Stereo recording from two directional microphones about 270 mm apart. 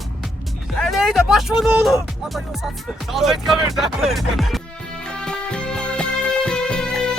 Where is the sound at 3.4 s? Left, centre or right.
Centre.